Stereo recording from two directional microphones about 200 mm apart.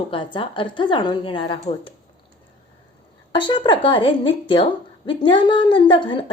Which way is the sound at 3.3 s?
25° left (ahead or behind).